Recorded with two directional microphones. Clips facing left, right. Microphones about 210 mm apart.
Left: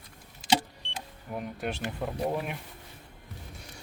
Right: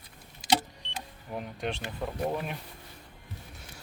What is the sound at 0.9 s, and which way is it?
Speech, 5° left (ahead or behind).